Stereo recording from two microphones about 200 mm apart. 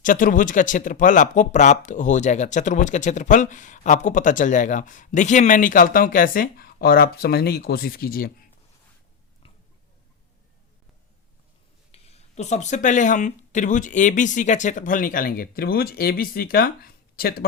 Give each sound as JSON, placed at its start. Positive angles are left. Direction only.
{"t": 0.0, "sound": "speech", "side_deg": 40}
{"t": 11.9, "sound": "speech", "side_deg": 30}